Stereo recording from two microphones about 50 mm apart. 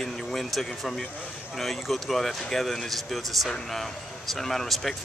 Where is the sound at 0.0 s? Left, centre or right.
Centre.